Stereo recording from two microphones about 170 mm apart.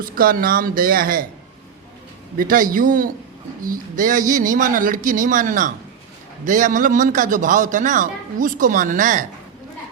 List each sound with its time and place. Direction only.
0.0 s speech: 55° right (ahead or behind)
2.4 s a man's voice: 55° right (ahead or behind)